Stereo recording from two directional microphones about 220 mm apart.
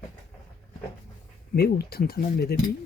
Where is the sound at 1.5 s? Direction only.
45° left (ahead or behind).